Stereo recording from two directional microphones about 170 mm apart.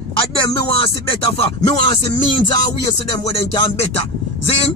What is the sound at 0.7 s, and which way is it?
Speech, 30° left (ahead or behind).